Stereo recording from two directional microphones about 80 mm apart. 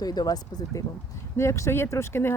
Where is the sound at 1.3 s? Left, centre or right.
Left.